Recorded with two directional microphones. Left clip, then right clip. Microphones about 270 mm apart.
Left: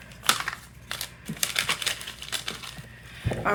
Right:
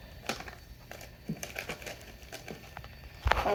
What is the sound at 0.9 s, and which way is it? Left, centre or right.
Crumpling, left.